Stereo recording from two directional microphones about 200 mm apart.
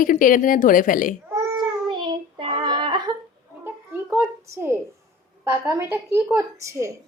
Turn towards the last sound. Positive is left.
turn(degrees=-15)  # may be behind; listen again after turning